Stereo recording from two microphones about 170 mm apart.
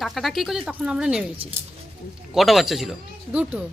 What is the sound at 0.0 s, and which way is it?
A man's voice, centre (ahead or behind).